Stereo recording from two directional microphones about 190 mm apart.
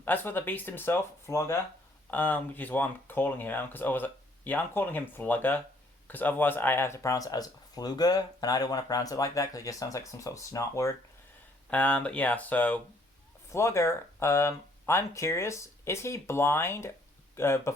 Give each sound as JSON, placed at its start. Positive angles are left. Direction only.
{"t": 0.0, "sound": "speech", "side_deg": 10}